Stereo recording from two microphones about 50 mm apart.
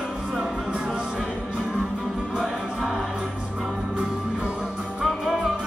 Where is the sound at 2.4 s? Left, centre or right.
Centre.